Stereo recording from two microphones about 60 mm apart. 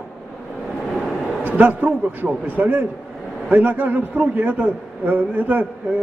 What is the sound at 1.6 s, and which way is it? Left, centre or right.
A man's voice, right.